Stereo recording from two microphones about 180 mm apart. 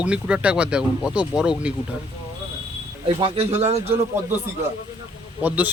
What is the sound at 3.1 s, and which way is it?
Speech, 30° right (ahead or behind).